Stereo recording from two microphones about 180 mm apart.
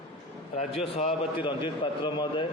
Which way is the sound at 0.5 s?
35° left (ahead or behind).